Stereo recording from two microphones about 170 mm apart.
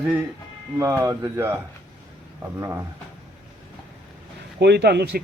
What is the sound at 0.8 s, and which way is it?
Speech, 15° right (ahead or behind).